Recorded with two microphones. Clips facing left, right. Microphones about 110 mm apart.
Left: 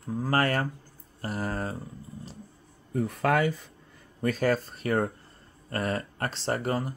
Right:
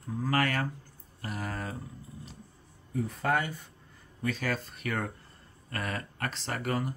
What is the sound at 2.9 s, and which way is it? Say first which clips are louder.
Speech: left 4 dB; 65° left (ahead or behind).